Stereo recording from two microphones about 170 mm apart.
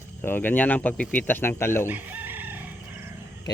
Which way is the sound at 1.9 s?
10° right (ahead or behind).